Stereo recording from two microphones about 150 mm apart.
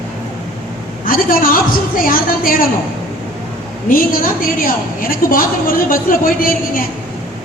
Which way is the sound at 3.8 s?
70° left (ahead or behind).